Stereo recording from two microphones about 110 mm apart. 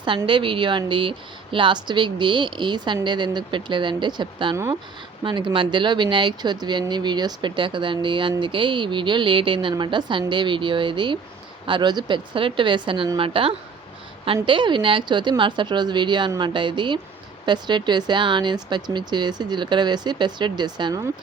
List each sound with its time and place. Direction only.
0.3 s speech: 50° right (ahead or behind)